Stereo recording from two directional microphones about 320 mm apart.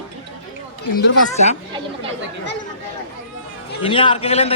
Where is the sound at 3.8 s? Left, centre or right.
Centre.